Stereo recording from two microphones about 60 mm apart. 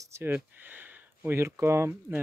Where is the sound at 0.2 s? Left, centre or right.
Right.